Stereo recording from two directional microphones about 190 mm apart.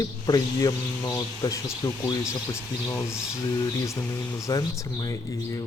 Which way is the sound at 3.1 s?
5° right (ahead or behind).